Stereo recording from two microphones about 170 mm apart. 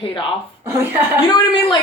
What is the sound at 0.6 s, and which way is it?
Speech, 15° right (ahead or behind).